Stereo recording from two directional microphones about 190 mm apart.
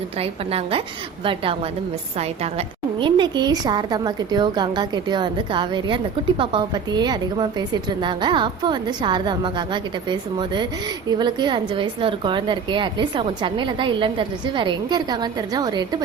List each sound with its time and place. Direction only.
0.2 s a woman's voice: 30° right (ahead or behind)